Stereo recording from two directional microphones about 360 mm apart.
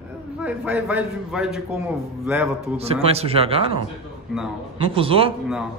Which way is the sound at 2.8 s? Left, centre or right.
Centre.